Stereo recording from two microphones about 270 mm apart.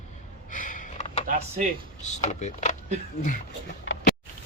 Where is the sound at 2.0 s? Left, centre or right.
Left.